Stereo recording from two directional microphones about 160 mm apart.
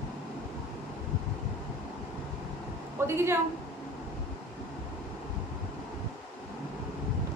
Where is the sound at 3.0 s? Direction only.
15° right (ahead or behind).